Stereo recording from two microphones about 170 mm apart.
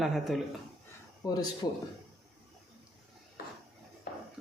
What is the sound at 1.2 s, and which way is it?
Speech, 20° left (ahead or behind).